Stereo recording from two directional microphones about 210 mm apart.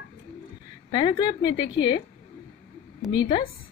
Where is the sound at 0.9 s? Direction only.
20° left (ahead or behind).